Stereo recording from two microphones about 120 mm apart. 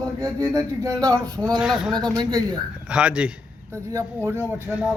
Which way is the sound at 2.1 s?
35° right (ahead or behind).